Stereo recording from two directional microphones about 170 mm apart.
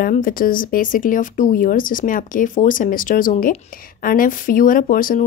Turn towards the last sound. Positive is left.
turn(degrees=55)  # may be behind; listen again after turning